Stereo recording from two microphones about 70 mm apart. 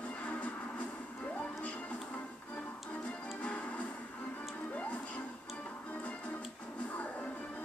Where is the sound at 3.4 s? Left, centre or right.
Centre.